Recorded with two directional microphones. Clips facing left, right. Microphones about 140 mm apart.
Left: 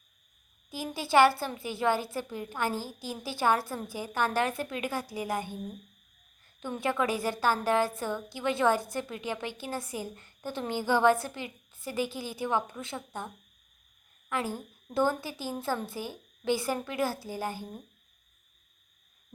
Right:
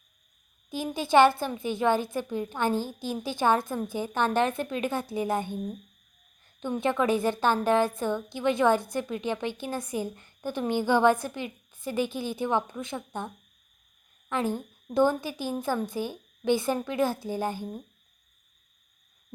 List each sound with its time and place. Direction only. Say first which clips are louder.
0.7 s a woman's voice: right 3 dB; 20° right (ahead or behind)
6.6 s a woman's voice: right 3 dB; 20° right (ahead or behind)